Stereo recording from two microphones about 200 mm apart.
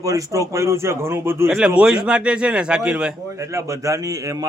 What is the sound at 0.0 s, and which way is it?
A man's voice, 15° right (ahead or behind).